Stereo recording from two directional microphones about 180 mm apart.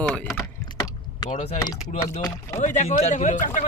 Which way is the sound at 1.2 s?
40° left (ahead or behind).